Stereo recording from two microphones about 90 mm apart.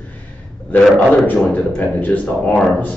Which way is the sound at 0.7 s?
20° left (ahead or behind).